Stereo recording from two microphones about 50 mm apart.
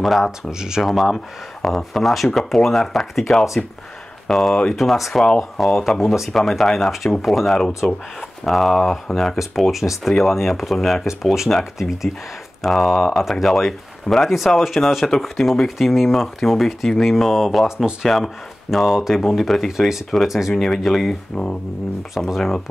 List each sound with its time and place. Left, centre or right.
0.0 s speech: centre
0.4 s speech: centre
0.8 s speech: centre
4.3 s speech: centre
7.8 s speech: centre
8.5 s speech: centre
9.4 s speech: centre
22.2 s speech: centre